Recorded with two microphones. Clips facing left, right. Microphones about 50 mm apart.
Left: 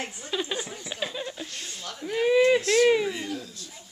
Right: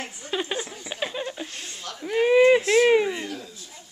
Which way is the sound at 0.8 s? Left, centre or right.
Centre.